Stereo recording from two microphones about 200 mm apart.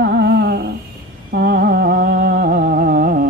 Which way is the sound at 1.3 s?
50° right (ahead or behind).